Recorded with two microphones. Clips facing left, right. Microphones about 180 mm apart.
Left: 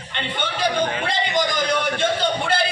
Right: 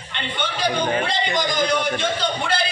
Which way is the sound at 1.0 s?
55° left (ahead or behind).